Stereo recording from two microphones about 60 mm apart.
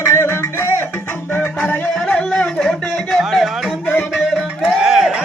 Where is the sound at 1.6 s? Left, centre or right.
Left.